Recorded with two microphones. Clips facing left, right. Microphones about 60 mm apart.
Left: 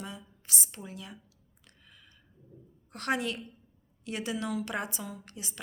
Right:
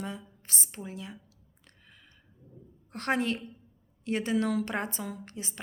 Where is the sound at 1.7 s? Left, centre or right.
Right.